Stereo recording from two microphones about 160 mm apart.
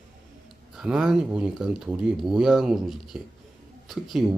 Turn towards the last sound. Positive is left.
turn(degrees=0)  # may be behind; listen again after turning